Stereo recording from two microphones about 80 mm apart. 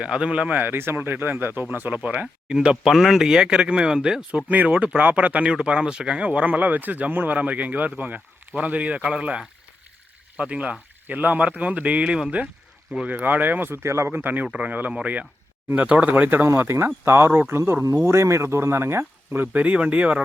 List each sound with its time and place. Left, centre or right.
0.0 s speech: centre; by 14.2 s right
14.2 s speech: right
16.5 s speech: right; by 20.2 s centre